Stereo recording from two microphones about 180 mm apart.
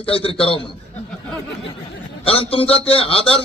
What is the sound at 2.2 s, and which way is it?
A man's voice, 30° left (ahead or behind).